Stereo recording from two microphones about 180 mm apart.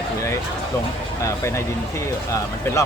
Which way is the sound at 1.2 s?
15° left (ahead or behind).